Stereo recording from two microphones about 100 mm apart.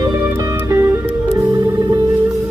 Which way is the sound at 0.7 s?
25° right (ahead or behind).